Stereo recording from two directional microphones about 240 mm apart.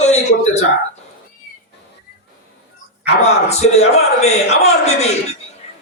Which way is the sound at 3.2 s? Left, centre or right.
Left.